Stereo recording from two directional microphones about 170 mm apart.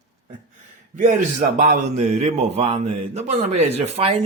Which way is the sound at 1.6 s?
50° right (ahead or behind).